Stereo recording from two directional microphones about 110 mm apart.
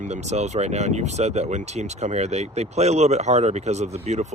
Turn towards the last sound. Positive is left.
turn(degrees=-90)